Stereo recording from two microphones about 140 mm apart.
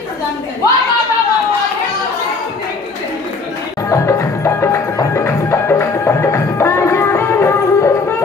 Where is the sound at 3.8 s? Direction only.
20° left (ahead or behind).